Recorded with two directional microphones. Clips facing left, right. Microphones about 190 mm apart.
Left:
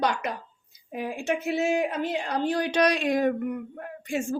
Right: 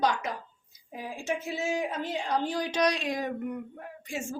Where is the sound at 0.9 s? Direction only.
65° left (ahead or behind).